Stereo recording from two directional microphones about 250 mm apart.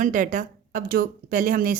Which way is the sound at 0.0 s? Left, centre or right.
Right.